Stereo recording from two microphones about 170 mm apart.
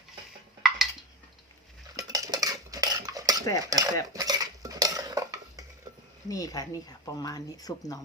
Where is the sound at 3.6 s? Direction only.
20° right (ahead or behind).